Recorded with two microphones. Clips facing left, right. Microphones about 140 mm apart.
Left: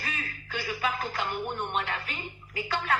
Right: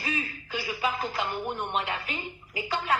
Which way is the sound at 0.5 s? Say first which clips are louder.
Right 1 dB; 35° right (ahead or behind).